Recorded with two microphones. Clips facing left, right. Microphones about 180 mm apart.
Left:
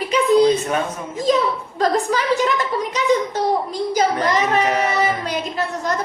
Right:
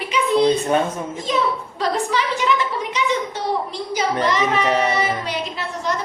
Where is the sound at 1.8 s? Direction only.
45° left (ahead or behind).